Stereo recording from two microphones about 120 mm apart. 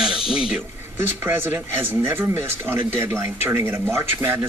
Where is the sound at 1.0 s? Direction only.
15° right (ahead or behind).